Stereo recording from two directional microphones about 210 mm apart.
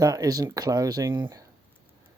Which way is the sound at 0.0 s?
15° right (ahead or behind).